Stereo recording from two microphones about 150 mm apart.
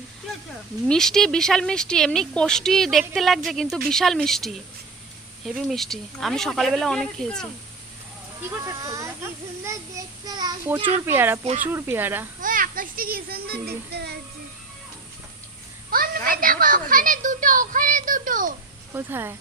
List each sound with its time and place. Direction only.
0.9 s speech: 5° left (ahead or behind)
8.4 s a child's voice: 20° right (ahead or behind)
10.8 s speech: 40° right (ahead or behind)
11.0 s speech: 15° right (ahead or behind)
12.4 s a child's voice: 65° right (ahead or behind); by 14.2 s 90° right
15.9 s a child's voice: 75° right (ahead or behind)
18.9 s speech: 15° right (ahead or behind)